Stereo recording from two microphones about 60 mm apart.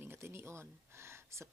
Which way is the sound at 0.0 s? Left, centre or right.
Right.